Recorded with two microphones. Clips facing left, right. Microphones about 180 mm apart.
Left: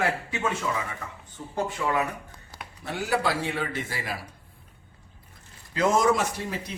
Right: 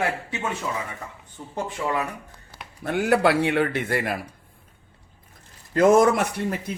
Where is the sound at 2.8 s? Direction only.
55° right (ahead or behind).